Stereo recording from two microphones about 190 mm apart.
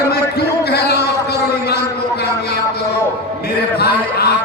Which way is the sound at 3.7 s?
55° left (ahead or behind).